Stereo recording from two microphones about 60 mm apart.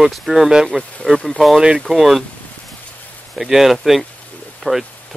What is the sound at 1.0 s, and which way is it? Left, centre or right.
Speech, centre.